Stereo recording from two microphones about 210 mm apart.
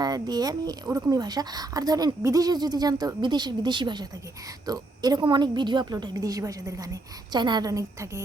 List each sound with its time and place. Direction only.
0.0 s speech: 20° right (ahead or behind)